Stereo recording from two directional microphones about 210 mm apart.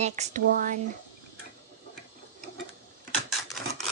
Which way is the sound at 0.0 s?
35° right (ahead or behind).